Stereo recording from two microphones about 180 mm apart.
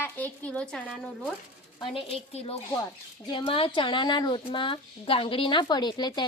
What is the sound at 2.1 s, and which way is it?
Speech, 35° left (ahead or behind).